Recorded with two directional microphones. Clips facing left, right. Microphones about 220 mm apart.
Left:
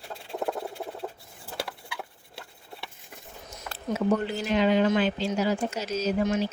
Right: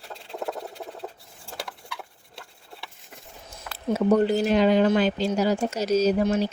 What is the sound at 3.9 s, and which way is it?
Speech, 40° right (ahead or behind).